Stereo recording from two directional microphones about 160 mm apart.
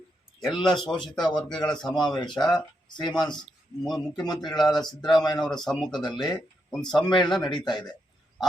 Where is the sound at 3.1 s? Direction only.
5° left (ahead or behind).